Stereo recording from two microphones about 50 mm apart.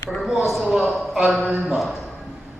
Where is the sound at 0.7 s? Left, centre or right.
Centre.